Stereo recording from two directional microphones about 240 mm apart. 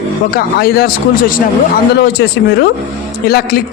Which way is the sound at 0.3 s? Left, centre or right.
Left.